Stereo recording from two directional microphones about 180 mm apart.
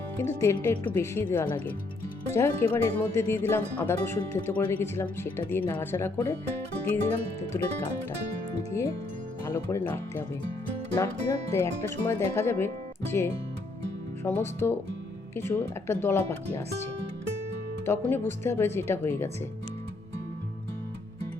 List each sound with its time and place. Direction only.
0.2 s speech: 15° left (ahead or behind)
8.8 s speech: 15° left (ahead or behind)